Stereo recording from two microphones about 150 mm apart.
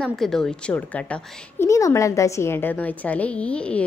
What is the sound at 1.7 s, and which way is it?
A woman's voice, 20° left (ahead or behind).